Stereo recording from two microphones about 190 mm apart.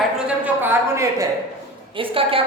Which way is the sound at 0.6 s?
15° right (ahead or behind).